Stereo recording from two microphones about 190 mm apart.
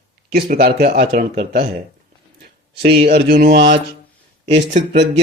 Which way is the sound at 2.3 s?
55° right (ahead or behind).